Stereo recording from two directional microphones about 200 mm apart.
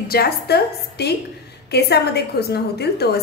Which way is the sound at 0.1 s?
55° left (ahead or behind).